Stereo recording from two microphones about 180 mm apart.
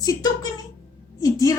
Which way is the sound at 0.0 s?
20° left (ahead or behind).